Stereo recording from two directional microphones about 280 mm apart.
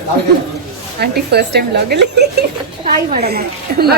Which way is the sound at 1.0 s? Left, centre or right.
Right.